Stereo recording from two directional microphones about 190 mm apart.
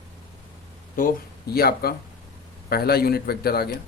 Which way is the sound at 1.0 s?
50° left (ahead or behind).